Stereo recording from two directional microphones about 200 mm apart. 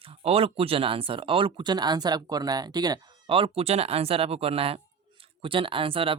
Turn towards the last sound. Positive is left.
turn(degrees=-25)  # may be behind; listen again after turning